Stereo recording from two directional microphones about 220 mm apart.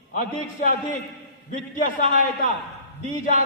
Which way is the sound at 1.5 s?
35° left (ahead or behind).